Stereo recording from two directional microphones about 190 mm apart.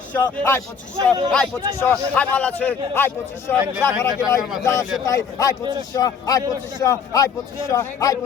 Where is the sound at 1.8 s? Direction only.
10° left (ahead or behind).